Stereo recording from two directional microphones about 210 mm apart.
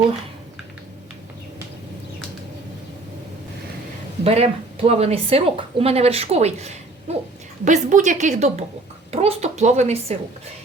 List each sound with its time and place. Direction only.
4.2 s a woman's voice: 30° right (ahead or behind)